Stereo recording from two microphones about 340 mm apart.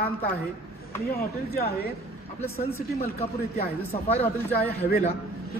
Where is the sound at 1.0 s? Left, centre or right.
Left.